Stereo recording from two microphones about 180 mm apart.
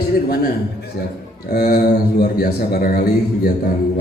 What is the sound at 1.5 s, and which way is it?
A man's voice, 55° left (ahead or behind).